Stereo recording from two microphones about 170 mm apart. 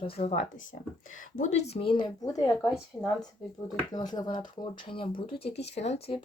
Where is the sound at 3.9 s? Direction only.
25° left (ahead or behind).